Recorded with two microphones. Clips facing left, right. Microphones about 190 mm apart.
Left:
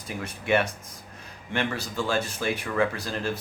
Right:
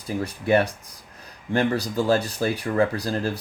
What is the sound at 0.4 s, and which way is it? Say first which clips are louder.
Speech: right 4 dB; 35° right (ahead or behind).